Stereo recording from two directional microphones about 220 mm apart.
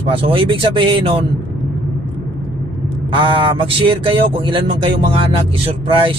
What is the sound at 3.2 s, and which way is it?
Speech, 25° right (ahead or behind).